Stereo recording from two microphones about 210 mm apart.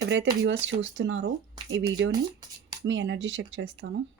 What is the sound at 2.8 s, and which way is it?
Speech, 60° right (ahead or behind).